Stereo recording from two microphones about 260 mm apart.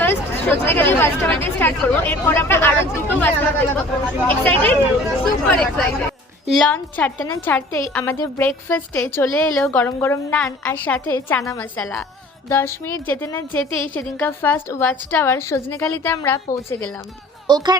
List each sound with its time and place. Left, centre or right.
0.0 s a woman's voice: centre
17.4 s speech: centre